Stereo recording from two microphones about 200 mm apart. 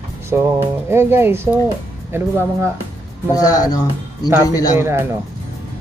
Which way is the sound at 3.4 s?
20° left (ahead or behind).